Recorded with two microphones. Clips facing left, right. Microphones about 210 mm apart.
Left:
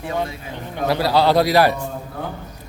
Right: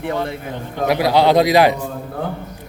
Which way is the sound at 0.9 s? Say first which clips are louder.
Right 3 dB; 15° right (ahead or behind).